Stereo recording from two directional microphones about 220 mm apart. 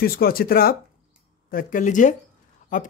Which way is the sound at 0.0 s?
40° left (ahead or behind).